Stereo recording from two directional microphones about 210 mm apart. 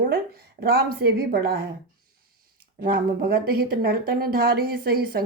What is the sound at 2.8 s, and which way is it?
Speech, 50° right (ahead or behind).